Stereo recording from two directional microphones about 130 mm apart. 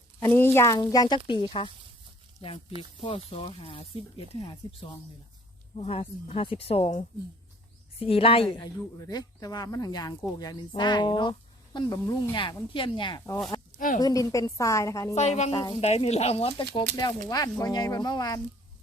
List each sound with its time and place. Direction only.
0.2 s speech: 15° left (ahead or behind); by 7.0 s 50° left (ahead or behind)
8.0 s speech: 45° left (ahead or behind)
8.6 s speech: 30° left (ahead or behind)
13.7 s a woman's voice: 90° left
14.0 s speech: 25° left (ahead or behind)
15.1 s speech: 60° left (ahead or behind)
15.5 s speech: 35° left (ahead or behind)
15.8 s speech: 55° left (ahead or behind)
17.2 s speech: 30° left (ahead or behind)